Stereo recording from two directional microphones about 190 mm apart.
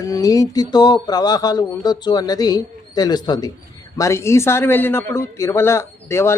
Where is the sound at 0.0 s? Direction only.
20° left (ahead or behind).